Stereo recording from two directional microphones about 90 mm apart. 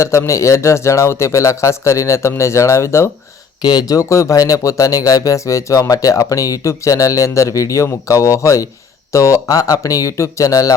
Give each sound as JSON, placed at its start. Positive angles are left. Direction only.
{"t": 0.0, "sound": "speech", "side_deg": 35}
{"t": 3.6, "sound": "speech", "side_deg": 50}